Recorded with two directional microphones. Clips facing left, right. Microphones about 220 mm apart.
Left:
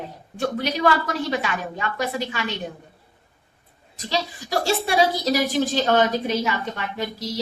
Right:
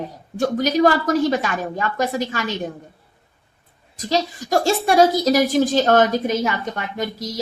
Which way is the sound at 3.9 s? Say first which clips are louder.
Right 5 dB; 45° right (ahead or behind).